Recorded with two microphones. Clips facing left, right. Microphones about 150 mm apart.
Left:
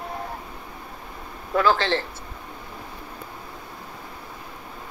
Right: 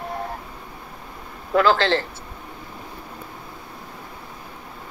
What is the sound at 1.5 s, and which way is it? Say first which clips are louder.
Speech: right 3 dB; 90° right.